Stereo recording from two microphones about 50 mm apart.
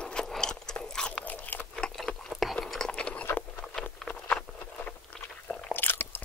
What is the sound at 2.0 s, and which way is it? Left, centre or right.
Chewing, centre.